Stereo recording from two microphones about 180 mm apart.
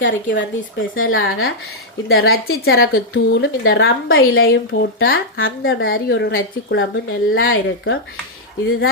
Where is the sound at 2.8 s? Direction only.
85° left.